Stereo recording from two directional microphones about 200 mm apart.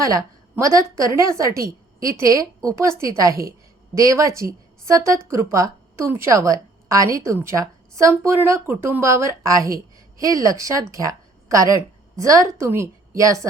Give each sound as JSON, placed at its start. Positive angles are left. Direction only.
{"t": 0.0, "sound": "a woman's voice", "side_deg": -15}